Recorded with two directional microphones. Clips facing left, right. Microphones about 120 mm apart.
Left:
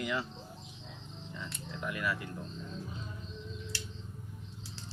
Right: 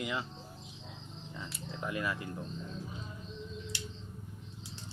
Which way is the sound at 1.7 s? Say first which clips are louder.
Even; 30° right (ahead or behind).